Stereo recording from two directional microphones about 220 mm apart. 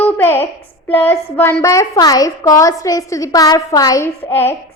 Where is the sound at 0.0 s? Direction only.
10° left (ahead or behind).